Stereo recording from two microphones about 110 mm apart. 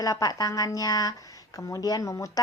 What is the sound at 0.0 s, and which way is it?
Speech, 35° left (ahead or behind).